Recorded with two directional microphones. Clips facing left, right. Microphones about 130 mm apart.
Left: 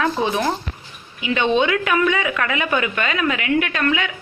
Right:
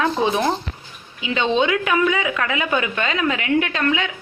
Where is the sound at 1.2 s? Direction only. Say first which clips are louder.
Left 1 dB; 20° right (ahead or behind).